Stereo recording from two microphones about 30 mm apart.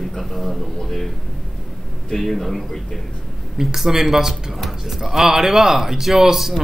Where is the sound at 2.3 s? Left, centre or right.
Centre.